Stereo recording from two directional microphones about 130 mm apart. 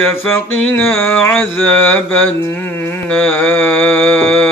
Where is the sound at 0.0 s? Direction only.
15° left (ahead or behind).